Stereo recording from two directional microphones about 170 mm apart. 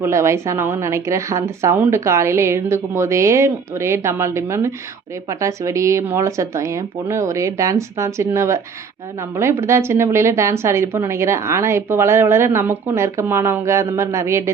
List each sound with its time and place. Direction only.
0.0 s a woman's voice: 15° right (ahead or behind)